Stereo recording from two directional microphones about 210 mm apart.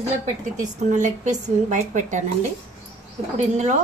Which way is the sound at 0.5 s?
35° right (ahead or behind).